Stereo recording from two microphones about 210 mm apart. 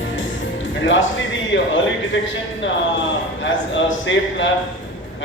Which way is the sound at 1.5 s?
65° left (ahead or behind).